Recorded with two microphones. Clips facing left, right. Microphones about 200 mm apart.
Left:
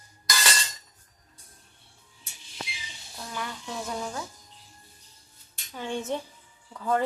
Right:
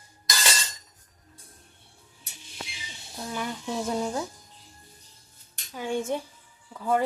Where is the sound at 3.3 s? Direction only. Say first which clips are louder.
Right 5 dB; 20° right (ahead or behind).